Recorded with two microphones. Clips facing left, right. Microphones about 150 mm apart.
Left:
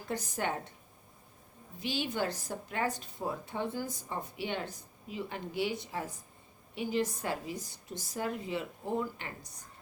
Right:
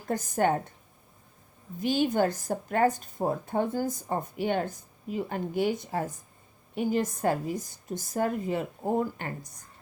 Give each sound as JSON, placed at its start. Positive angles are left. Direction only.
{"t": 0.1, "sound": "a woman's voice", "side_deg": -50}
{"t": 1.8, "sound": "a woman's voice", "side_deg": -45}